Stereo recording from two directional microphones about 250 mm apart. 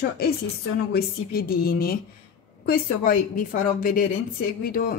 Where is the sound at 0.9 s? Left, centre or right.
Left.